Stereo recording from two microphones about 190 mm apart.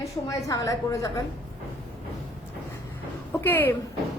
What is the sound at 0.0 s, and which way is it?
A woman's voice, 15° left (ahead or behind).